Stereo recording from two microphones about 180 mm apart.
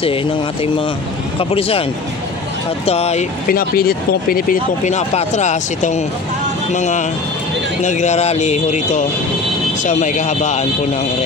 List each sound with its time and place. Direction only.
1.4 s speech: 30° left (ahead or behind)
2.9 s speech: 35° left (ahead or behind)
3.4 s speech: 55° left (ahead or behind)